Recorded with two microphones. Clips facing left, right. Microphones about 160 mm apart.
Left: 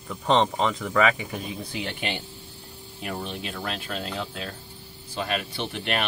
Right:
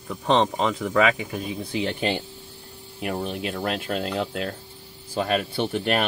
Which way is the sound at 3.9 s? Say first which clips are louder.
Right 6 dB; 35° right (ahead or behind).